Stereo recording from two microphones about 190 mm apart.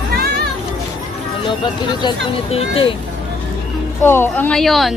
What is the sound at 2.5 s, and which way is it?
Speech, 30° left (ahead or behind).